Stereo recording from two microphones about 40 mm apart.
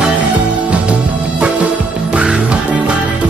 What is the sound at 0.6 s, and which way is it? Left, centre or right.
Music, right.